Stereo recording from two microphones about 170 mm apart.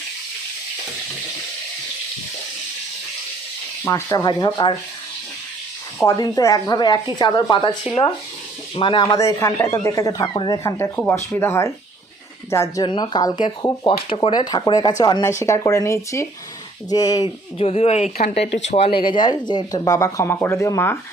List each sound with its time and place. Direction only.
3.8 s speech: 15° left (ahead or behind)
6.0 s speech: 20° left (ahead or behind)
8.7 s speech: 30° left (ahead or behind)
9.0 s speech: 20° left (ahead or behind)
17.6 s speech: 35° left (ahead or behind); by 21.0 s 15° left (ahead or behind)